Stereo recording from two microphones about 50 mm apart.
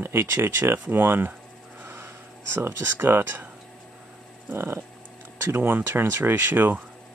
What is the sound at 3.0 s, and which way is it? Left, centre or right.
Speech, right.